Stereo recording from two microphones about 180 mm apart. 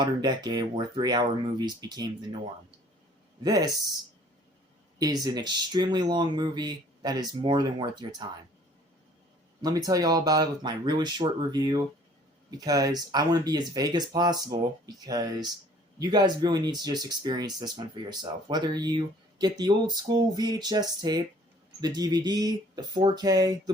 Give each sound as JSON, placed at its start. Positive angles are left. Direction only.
{"t": 0.0, "sound": "speech", "side_deg": -25}
{"t": 3.4, "sound": "speech", "side_deg": -20}
{"t": 4.9, "sound": "speech", "side_deg": -20}
{"t": 9.6, "sound": "speech", "side_deg": -20}